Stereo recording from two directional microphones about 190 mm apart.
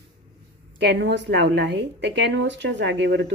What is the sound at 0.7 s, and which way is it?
A woman's voice, 60° right (ahead or behind).